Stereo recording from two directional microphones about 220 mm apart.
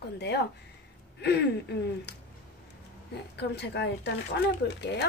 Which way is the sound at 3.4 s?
50° left (ahead or behind).